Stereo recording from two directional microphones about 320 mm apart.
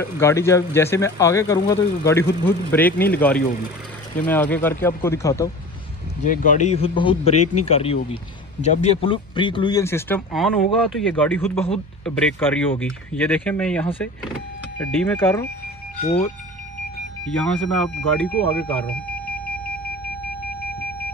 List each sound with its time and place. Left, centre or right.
0.0 s a man's voice: centre
6.2 s speech: left
7.3 s speech: left
7.6 s a man's voice: centre
16.0 s speech: left
17.4 s speech: centre
18.7 s a sound: centre